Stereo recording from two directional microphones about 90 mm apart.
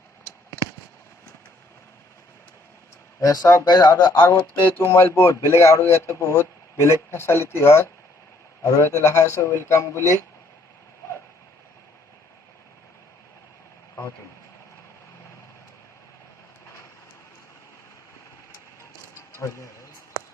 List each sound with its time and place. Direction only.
3.2 s a man's voice: 40° left (ahead or behind)
3.7 s speech: 50° left (ahead or behind)
4.2 s a man's voice: 30° left (ahead or behind)
19.4 s a man's voice: 30° left (ahead or behind)